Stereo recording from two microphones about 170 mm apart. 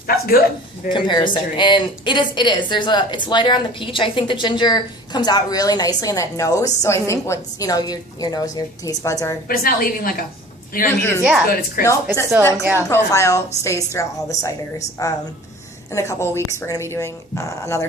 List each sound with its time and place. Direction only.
0.1 s speech: 60° left (ahead or behind)
0.9 s speech: 25° left (ahead or behind)
9.5 s a woman's voice: 55° left (ahead or behind)
11.2 s a woman's voice: 5° right (ahead or behind)
11.4 s a woman's voice: 60° left (ahead or behind)
12.4 s speech: 15° left (ahead or behind)